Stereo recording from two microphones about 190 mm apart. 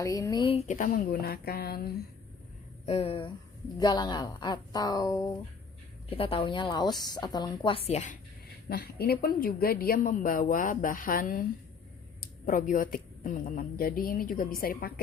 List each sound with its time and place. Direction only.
0.0 s a woman's voice: 20° left (ahead or behind)
0.7 s a woman's voice: 45° left (ahead or behind)
2.8 s a woman's voice: 30° left (ahead or behind)
8.7 s a woman's voice: 55° left (ahead or behind)